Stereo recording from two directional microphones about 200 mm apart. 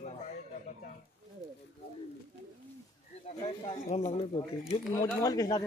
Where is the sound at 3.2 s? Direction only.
30° left (ahead or behind).